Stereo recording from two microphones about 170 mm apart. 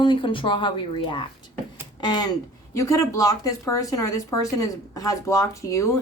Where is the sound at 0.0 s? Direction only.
30° left (ahead or behind).